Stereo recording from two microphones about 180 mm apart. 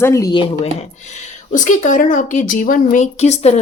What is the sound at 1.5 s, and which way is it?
A woman's voice, 45° left (ahead or behind).